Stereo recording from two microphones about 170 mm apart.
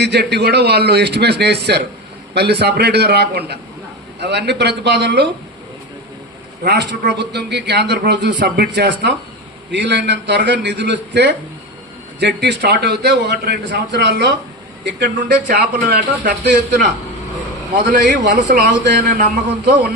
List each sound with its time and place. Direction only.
0.0 s a man's voice: 75° right (ahead or behind)
4.2 s a man's voice: 85° right
6.7 s a man's voice: 75° right (ahead or behind)
15.2 s a man's voice: 65° right (ahead or behind); by 16.6 s 85° right
17.7 s a man's voice: 45° right (ahead or behind)
18.4 s a man's voice: 85° right